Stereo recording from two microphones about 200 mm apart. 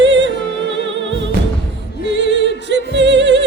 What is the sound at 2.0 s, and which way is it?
Music, 65° right (ahead or behind).